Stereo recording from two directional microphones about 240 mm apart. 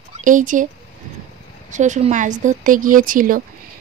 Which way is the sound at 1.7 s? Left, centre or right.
Right.